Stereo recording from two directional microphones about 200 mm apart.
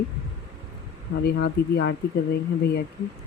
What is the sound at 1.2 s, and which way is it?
Speech, 55° left (ahead or behind).